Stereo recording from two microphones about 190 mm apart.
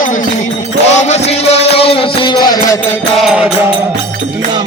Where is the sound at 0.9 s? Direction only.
35° left (ahead or behind).